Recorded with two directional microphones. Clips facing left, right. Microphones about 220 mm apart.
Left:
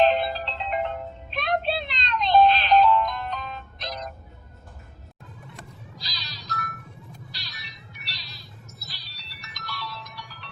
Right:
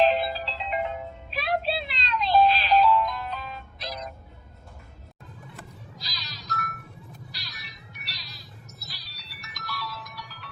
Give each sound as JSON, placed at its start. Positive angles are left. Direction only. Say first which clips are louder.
{"t": 0.0, "sound": "music", "louder": "left 1 dB", "side_deg": 0}
{"t": 5.5, "sound": "music", "louder": "even", "side_deg": 0}
{"t": 7.3, "sound": "cat", "louder": "left 1 dB", "side_deg": 0}